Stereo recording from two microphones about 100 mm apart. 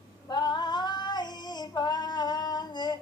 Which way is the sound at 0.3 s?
45° left (ahead or behind).